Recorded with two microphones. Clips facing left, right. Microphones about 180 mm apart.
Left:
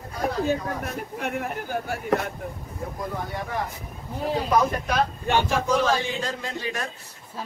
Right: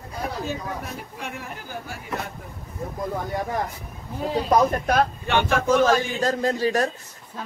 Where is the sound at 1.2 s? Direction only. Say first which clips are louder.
Left 9 dB; 60° left (ahead or behind).